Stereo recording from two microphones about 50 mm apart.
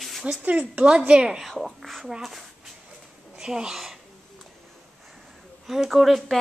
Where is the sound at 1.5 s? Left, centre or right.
Centre.